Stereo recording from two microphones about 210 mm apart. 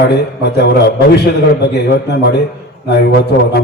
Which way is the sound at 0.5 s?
50° left (ahead or behind).